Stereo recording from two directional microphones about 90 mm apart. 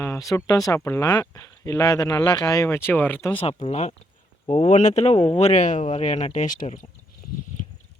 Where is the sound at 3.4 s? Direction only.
90° left.